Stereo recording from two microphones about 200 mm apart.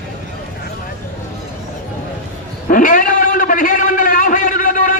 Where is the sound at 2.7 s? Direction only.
40° left (ahead or behind).